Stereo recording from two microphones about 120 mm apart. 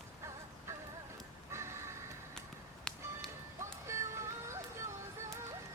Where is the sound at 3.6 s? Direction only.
25° right (ahead or behind).